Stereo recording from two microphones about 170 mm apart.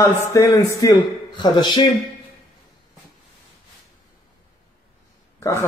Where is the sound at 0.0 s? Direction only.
20° left (ahead or behind).